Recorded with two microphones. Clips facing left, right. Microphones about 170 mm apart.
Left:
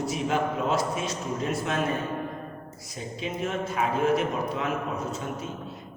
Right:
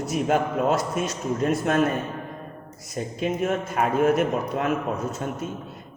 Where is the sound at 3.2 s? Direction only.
50° right (ahead or behind).